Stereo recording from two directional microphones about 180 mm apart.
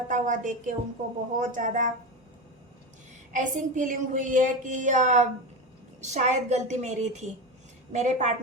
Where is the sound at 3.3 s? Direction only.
45° right (ahead or behind).